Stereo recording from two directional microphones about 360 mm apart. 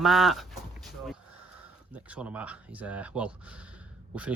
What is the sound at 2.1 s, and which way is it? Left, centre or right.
Speech, centre.